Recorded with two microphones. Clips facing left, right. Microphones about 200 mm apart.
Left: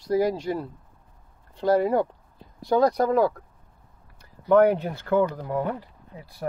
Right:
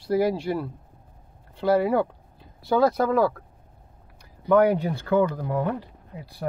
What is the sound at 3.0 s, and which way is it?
Speech, 15° left (ahead or behind).